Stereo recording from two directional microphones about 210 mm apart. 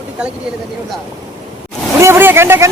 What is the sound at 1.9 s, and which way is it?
Vehicle, 10° right (ahead or behind).